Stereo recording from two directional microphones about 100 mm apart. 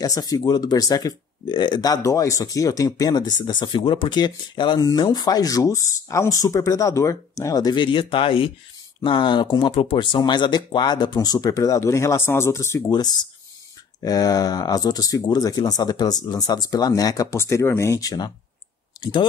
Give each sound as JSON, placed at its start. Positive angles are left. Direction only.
{"t": 0.0, "sound": "speech", "side_deg": 40}
{"t": 12.9, "sound": "speech", "side_deg": 45}